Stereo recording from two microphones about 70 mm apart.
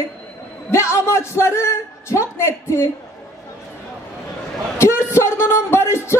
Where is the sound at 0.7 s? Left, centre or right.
Left.